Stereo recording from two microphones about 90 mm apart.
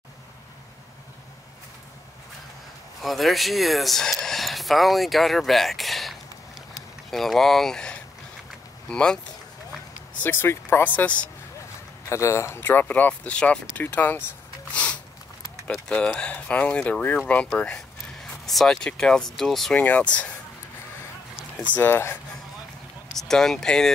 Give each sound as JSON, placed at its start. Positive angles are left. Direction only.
{"t": 3.0, "sound": "speech", "side_deg": 0}
{"t": 10.2, "sound": "speech", "side_deg": 25}
{"t": 12.1, "sound": "speech", "side_deg": 35}
{"t": 14.7, "sound": "a sound", "side_deg": 15}
{"t": 15.7, "sound": "speech", "side_deg": 5}
{"t": 19.8, "sound": "speech", "side_deg": 15}
{"t": 21.7, "sound": "speech", "side_deg": 25}
{"t": 23.1, "sound": "speech", "side_deg": 5}